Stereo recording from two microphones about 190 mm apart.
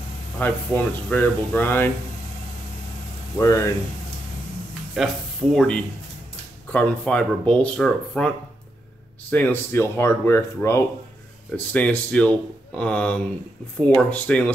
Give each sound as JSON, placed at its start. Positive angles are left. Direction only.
{"t": 0.4, "sound": "speech", "side_deg": 10}
{"t": 3.3, "sound": "speech", "side_deg": 15}
{"t": 4.9, "sound": "speech", "side_deg": 0}
{"t": 9.3, "sound": "speech", "side_deg": 10}